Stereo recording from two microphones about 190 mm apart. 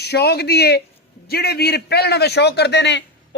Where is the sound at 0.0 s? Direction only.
60° left (ahead or behind).